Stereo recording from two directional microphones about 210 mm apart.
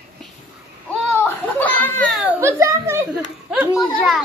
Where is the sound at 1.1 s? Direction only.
10° left (ahead or behind).